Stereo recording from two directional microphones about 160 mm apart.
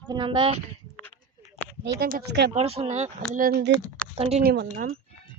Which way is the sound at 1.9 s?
85° right.